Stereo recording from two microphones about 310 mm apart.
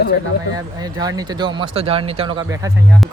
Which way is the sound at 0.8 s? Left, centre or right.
Centre.